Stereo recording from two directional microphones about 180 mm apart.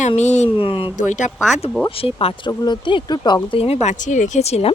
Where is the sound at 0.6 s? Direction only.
30° left (ahead or behind).